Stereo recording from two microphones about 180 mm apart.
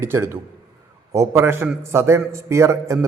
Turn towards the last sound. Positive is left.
turn(degrees=-15)  # may be behind; listen again after turning